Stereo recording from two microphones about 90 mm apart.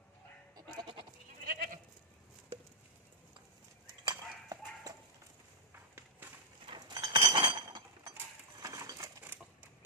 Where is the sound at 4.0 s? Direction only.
50° right (ahead or behind).